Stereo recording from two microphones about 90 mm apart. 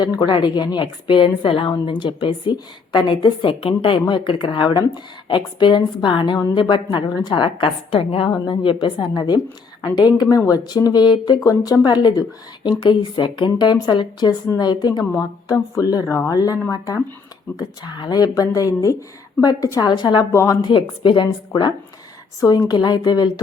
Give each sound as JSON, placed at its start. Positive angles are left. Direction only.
{"t": 0.3, "sound": "a woman's voice", "side_deg": 55}
{"t": 11.3, "sound": "a woman's voice", "side_deg": 40}
{"t": 15.4, "sound": "speech", "side_deg": 40}
{"t": 19.8, "sound": "speech", "side_deg": 50}
{"t": 20.3, "sound": "speech", "side_deg": 35}
{"t": 20.6, "sound": "a woman's voice", "side_deg": 60}